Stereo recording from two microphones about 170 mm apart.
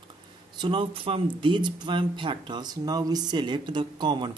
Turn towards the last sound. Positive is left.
turn(degrees=-25)  # may be behind; listen again after turning